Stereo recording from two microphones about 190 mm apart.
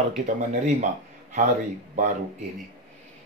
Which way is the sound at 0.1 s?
40° right (ahead or behind).